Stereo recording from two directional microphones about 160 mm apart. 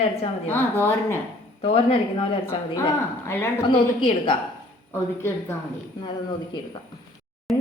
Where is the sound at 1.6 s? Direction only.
35° left (ahead or behind).